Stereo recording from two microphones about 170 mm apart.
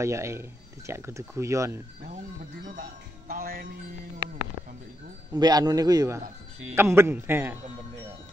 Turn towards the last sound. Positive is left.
turn(degrees=-10)  # may be behind; listen again after turning